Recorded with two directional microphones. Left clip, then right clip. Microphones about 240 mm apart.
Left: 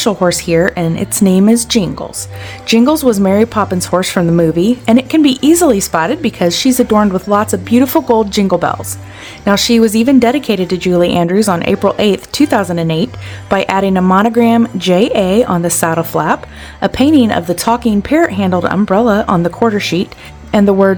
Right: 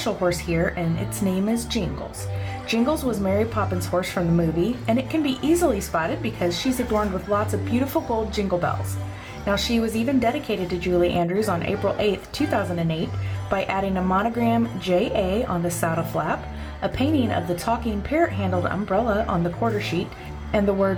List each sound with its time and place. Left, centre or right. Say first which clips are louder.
0.0 s speech: left 11 dB; left